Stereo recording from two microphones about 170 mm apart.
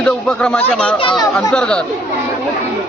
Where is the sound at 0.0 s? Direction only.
5° left (ahead or behind).